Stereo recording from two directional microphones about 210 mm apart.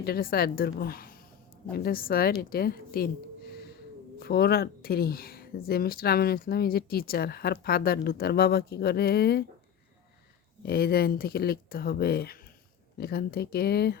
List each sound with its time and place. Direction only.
0.0 s speech: 45° left (ahead or behind)
4.2 s speech: 50° left (ahead or behind)
10.6 s speech: 50° left (ahead or behind)